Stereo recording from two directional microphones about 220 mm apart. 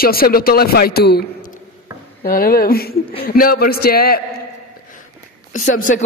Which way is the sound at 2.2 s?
40° left (ahead or behind).